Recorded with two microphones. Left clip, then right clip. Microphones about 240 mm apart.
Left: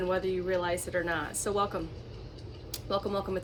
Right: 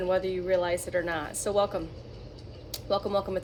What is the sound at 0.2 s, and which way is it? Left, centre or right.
Speech, centre.